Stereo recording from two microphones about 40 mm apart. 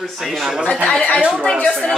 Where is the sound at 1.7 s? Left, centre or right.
Centre.